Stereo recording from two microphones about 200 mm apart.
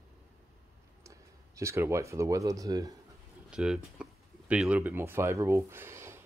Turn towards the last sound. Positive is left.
turn(degrees=-15)  # may be behind; listen again after turning